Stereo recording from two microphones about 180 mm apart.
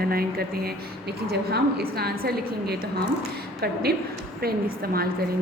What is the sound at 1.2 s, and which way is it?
A woman's voice, 60° right (ahead or behind).